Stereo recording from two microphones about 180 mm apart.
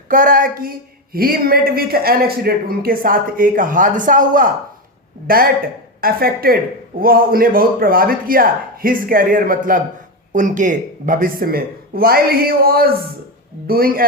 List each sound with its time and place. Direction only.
0.1 s speech: 50° right (ahead or behind)
6.0 s speech: 55° right (ahead or behind)